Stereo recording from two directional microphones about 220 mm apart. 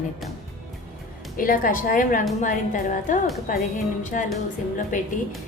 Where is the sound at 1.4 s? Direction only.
40° left (ahead or behind).